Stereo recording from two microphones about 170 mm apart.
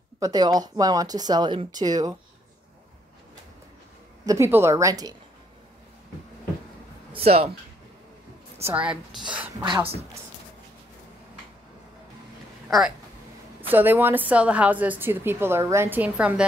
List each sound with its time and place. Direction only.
0.2 s speech: 25° right (ahead or behind)
4.3 s a woman's voice: 15° right (ahead or behind)
7.1 s speech: 35° right (ahead or behind)
8.6 s a woman's voice: 10° right (ahead or behind)
9.6 s speech: 25° right (ahead or behind)
12.6 s a woman's voice: centre (ahead or behind)